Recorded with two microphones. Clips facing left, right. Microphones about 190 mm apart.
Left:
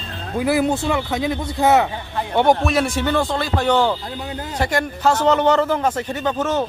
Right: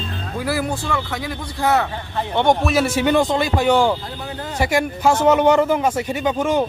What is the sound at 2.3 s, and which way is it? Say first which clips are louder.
A man's voice: left 1 dB; 5° left (ahead or behind).